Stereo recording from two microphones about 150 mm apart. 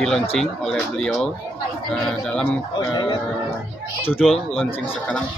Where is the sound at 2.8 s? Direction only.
30° left (ahead or behind).